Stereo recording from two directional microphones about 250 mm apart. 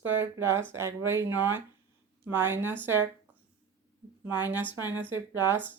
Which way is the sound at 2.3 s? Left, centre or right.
Centre.